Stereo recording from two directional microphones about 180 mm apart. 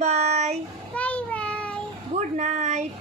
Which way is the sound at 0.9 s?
5° left (ahead or behind).